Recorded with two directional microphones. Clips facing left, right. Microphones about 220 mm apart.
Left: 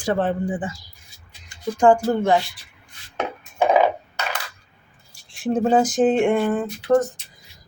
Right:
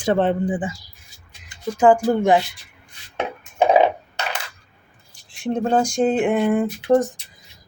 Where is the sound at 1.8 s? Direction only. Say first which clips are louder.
Right 1 dB; 5° right (ahead or behind).